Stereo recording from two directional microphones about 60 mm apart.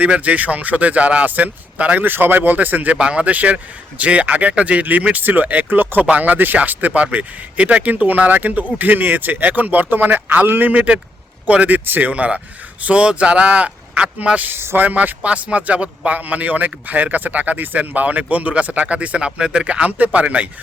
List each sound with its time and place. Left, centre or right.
0.0 s speech: right
2.0 s speech: right
14.5 s speech: right
14.8 s speech: right